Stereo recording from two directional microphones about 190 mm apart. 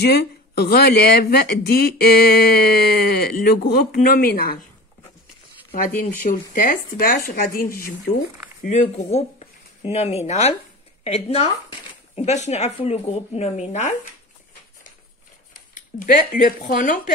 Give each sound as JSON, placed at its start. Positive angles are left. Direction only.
{"t": 0.0, "sound": "speech", "side_deg": 60}
{"t": 6.5, "sound": "speech", "side_deg": 50}
{"t": 8.6, "sound": "speech", "side_deg": 35}
{"t": 15.7, "sound": "speech", "side_deg": 45}